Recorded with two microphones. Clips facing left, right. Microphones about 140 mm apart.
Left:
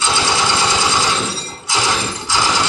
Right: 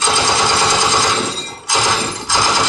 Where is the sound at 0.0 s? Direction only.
45° right (ahead or behind).